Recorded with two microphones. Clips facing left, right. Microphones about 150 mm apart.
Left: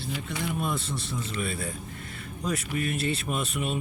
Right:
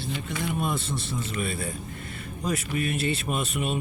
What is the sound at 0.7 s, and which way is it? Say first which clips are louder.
Speech: right 2 dB; 25° right (ahead or behind).